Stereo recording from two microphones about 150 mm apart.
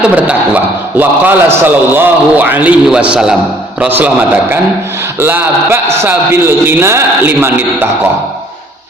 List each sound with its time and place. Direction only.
0.0 s a man's voice: 10° right (ahead or behind)